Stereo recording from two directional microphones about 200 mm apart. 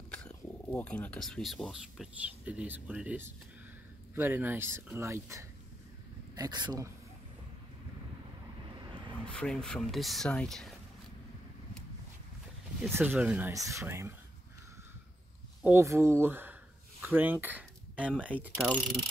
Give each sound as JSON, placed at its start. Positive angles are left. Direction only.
{"t": 0.1, "sound": "speech", "side_deg": 5}
{"t": 9.3, "sound": "speech", "side_deg": 5}
{"t": 12.9, "sound": "speech", "side_deg": -10}
{"t": 15.6, "sound": "speech", "side_deg": -15}
{"t": 18.7, "sound": "speech", "side_deg": 10}